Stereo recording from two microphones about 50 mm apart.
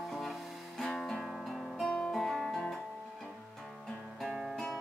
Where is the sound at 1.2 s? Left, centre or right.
Centre.